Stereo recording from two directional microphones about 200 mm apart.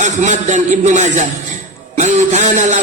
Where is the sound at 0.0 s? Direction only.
35° right (ahead or behind).